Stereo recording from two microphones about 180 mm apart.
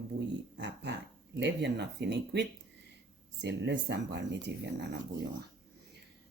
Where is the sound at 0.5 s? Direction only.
75° right (ahead or behind).